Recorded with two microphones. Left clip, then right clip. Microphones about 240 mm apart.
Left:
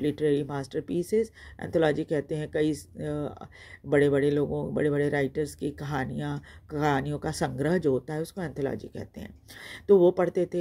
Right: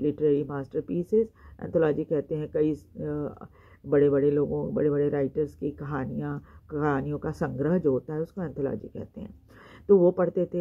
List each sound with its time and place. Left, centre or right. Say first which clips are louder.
0.0 s speech: right 2 dB; left